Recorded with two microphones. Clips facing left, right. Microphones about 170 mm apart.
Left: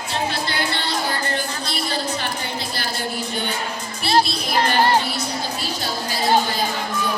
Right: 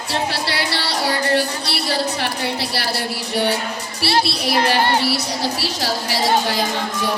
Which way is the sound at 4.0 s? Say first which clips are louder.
Even; 75° right (ahead or behind).